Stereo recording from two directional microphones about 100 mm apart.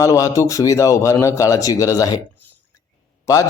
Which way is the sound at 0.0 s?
35° left (ahead or behind).